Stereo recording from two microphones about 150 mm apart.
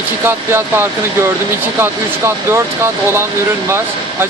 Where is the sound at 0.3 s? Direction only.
15° right (ahead or behind).